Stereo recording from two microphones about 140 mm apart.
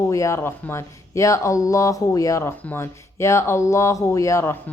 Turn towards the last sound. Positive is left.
turn(degrees=20)  # may be behind; listen again after turning